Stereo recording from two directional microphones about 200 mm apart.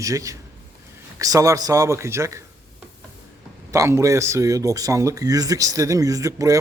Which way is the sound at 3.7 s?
15° right (ahead or behind).